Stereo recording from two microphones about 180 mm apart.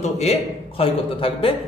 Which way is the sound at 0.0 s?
35° left (ahead or behind).